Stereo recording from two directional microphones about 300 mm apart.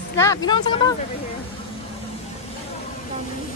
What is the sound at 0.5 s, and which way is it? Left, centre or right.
Speech, centre.